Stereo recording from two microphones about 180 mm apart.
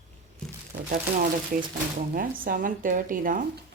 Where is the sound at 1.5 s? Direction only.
50° right (ahead or behind).